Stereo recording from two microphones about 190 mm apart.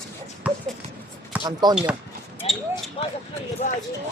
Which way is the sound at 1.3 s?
10° right (ahead or behind).